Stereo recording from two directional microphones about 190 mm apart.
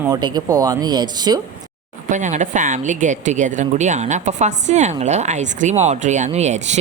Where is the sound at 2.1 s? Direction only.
40° right (ahead or behind).